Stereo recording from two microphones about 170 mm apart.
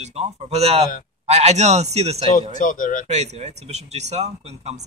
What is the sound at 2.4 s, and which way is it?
Speech, 50° left (ahead or behind).